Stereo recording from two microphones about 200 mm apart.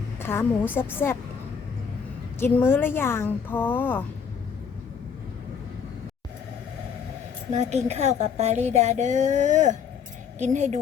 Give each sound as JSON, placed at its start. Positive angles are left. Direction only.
{"t": 0.2, "sound": "a woman's voice", "side_deg": 10}
{"t": 2.4, "sound": "a woman's voice", "side_deg": 10}
{"t": 7.5, "sound": "a woman's voice", "side_deg": -35}